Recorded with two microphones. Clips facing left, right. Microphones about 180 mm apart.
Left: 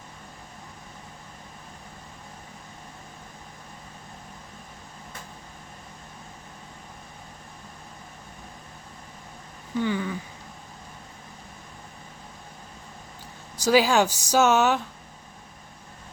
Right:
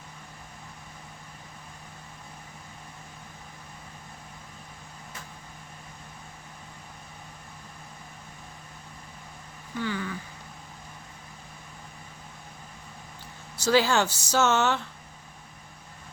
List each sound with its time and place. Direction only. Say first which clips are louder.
9.7 s speech: left 5 dB; 20° left (ahead or behind)
13.6 s speech: left 3 dB; 15° left (ahead or behind)